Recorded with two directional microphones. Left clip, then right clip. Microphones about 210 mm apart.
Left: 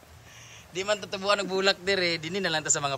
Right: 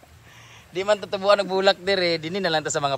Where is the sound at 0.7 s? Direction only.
5° left (ahead or behind).